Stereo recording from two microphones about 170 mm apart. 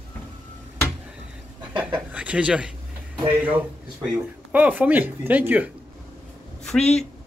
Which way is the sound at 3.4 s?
10° right (ahead or behind).